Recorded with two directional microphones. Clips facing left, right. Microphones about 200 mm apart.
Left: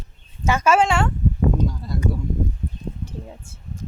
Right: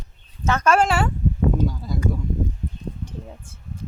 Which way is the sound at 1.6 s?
Centre (ahead or behind).